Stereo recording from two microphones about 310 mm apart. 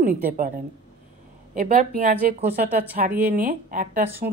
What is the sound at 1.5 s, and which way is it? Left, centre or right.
A woman's voice, right.